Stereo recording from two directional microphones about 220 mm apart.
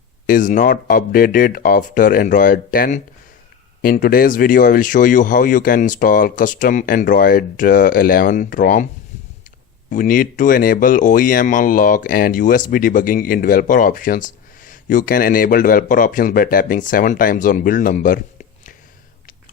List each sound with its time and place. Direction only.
0.3 s speech: 35° left (ahead or behind)
9.9 s speech: 40° left (ahead or behind)